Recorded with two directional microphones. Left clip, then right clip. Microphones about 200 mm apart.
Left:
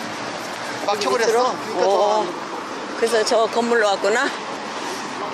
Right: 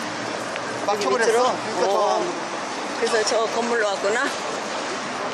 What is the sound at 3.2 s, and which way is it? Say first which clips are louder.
Speech: left 3 dB; 40° left (ahead or behind).